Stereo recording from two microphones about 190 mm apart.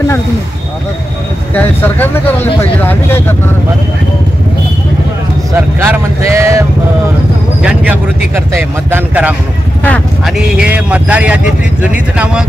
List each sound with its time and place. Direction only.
1.5 s speech: 10° left (ahead or behind)
5.5 s speech: 15° right (ahead or behind)
7.6 s speech: 5° right (ahead or behind)
9.8 s speech: 5° left (ahead or behind)